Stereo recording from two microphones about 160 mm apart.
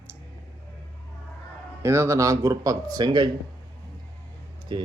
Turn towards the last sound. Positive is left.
turn(degrees=-30)  # may be behind; listen again after turning